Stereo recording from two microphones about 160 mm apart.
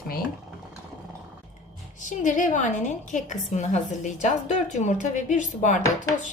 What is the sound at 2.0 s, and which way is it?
A woman's voice, 50° left (ahead or behind).